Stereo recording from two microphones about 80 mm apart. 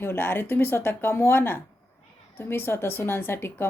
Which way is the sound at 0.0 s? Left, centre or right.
Left.